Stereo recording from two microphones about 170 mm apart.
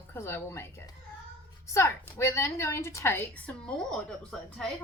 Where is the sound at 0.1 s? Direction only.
15° left (ahead or behind).